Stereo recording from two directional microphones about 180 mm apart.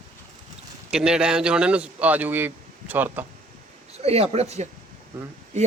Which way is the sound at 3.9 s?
35° right (ahead or behind).